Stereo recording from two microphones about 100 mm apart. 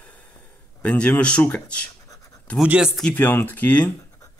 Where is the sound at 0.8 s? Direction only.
10° left (ahead or behind).